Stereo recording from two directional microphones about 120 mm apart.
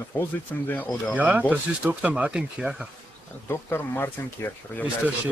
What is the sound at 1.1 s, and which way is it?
Speech, 15° right (ahead or behind).